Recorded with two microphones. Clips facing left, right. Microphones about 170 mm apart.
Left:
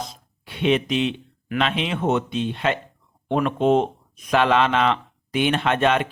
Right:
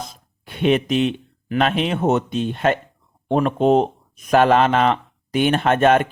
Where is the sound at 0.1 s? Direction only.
50° right (ahead or behind).